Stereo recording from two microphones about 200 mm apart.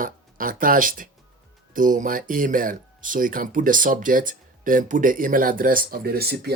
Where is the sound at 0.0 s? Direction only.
45° right (ahead or behind).